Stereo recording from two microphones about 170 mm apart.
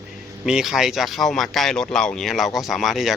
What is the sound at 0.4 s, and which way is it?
A man's voice, centre (ahead or behind).